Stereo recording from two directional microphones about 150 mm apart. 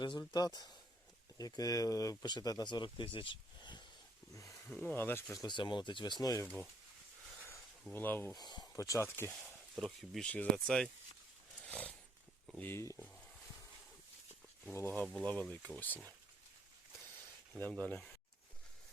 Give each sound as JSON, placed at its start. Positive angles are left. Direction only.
{"t": 0.0, "sound": "speech", "side_deg": 30}
{"t": 4.4, "sound": "a sound", "side_deg": 20}
{"t": 4.7, "sound": "speech", "side_deg": 10}
{"t": 5.3, "sound": "speech", "side_deg": 25}
{"t": 7.9, "sound": "speech", "side_deg": 15}
{"t": 8.4, "sound": "speech", "side_deg": 25}
{"t": 9.3, "sound": "speech", "side_deg": 0}
{"t": 11.6, "sound": "a sound", "side_deg": 10}
{"t": 12.5, "sound": "speech", "side_deg": 15}
{"t": 14.6, "sound": "speech", "side_deg": 15}
{"t": 17.6, "sound": "speech", "side_deg": 10}